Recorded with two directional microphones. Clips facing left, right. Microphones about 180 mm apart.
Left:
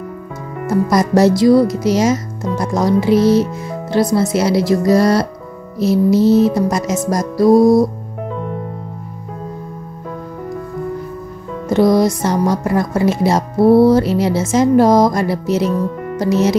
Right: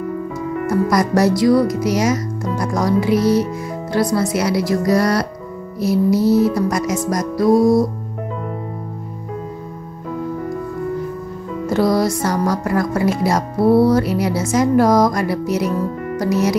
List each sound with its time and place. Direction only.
0.7 s speech: 25° left (ahead or behind)
11.7 s speech: 20° left (ahead or behind)